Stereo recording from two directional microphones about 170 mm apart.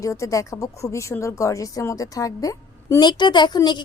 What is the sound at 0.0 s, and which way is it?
A woman's voice, 20° left (ahead or behind).